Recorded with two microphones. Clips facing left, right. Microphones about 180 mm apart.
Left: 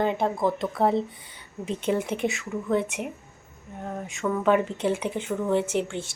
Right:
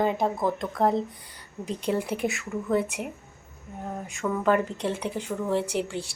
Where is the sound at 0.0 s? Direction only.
Centre (ahead or behind).